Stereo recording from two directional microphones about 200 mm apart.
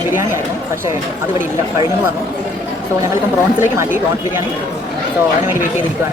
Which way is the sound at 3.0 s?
15° right (ahead or behind).